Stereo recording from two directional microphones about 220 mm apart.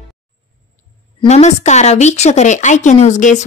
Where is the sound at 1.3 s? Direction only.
30° left (ahead or behind).